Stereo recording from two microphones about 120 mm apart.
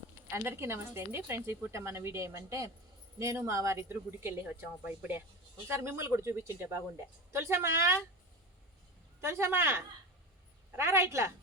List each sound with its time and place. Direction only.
0.3 s speech: 20° right (ahead or behind)
9.2 s speech: 20° right (ahead or behind)